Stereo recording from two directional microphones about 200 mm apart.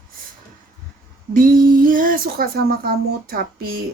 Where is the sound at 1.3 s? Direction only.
45° right (ahead or behind).